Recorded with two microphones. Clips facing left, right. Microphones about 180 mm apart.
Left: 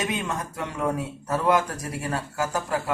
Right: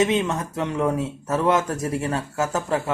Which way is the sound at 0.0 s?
25° right (ahead or behind).